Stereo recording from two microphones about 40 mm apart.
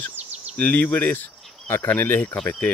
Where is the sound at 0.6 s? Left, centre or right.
Left.